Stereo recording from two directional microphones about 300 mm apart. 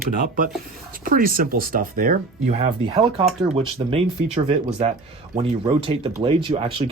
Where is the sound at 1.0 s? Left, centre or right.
Right.